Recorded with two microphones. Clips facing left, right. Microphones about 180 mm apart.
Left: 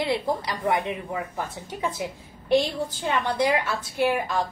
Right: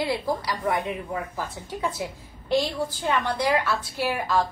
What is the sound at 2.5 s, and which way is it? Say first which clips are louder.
A woman's voice: left 2 dB; 20° left (ahead or behind).